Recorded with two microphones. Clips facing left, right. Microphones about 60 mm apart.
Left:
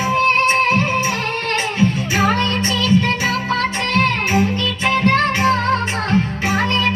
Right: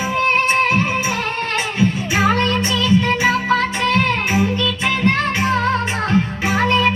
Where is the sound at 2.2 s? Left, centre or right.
Right.